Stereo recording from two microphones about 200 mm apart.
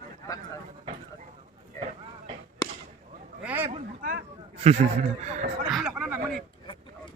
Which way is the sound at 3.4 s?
10° right (ahead or behind).